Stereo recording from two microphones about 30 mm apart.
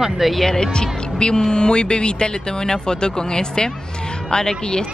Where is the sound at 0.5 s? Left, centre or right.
Left.